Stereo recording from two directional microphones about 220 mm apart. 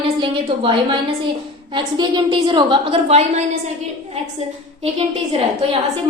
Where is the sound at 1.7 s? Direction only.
20° right (ahead or behind).